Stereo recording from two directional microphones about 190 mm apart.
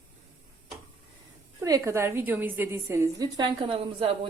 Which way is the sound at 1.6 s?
15° right (ahead or behind).